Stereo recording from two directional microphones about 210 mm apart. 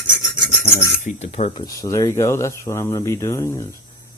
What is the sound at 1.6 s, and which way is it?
Speech, 15° left (ahead or behind).